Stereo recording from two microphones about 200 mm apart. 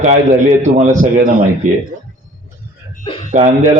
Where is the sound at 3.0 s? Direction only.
25° left (ahead or behind).